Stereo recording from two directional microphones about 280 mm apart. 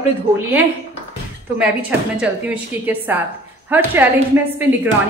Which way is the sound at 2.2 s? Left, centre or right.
Centre.